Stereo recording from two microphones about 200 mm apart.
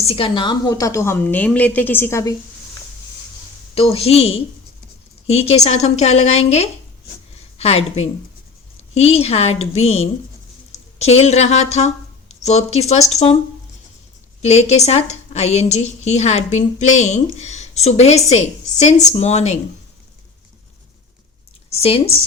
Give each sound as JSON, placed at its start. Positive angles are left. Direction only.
{"t": 0.0, "sound": "a woman's voice", "side_deg": 30}
{"t": 3.8, "sound": "a woman's voice", "side_deg": 30}
{"t": 14.4, "sound": "a woman's voice", "side_deg": 35}
{"t": 21.7, "sound": "a woman's voice", "side_deg": 30}